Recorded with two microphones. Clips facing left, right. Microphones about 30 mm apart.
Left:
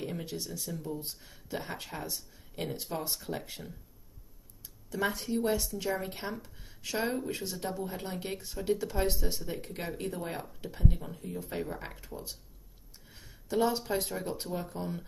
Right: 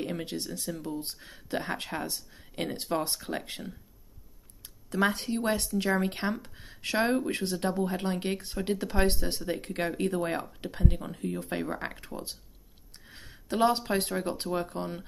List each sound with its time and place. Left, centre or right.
0.0 s speech: right
4.8 s speech: right
6.3 s speech: right
10.6 s speech: right